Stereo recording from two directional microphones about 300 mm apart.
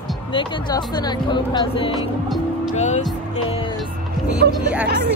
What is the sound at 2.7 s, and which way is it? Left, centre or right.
Speech, left.